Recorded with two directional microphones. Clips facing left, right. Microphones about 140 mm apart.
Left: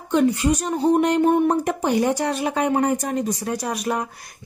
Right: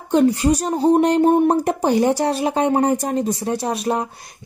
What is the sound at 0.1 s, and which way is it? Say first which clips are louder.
A woman's voice: right 3 dB; 35° right (ahead or behind).